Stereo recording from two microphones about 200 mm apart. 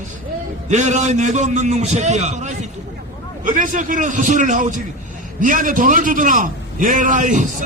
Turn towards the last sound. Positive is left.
turn(degrees=-40)  # may be behind; listen again after turning